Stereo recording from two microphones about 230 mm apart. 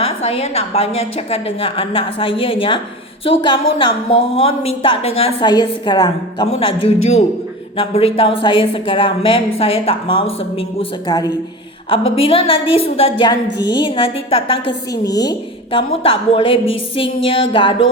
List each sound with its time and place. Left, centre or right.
0.3 s a woman's voice: left